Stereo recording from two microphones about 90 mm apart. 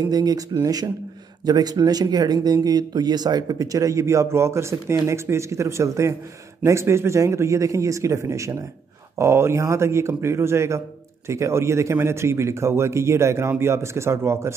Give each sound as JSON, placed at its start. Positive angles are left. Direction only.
{"t": 0.1, "sound": "speech", "side_deg": -45}